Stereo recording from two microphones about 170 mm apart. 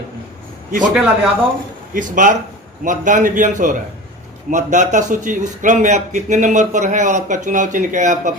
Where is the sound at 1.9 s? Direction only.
50° right (ahead or behind).